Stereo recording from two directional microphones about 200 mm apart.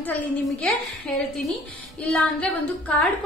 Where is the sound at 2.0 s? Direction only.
Centre (ahead or behind).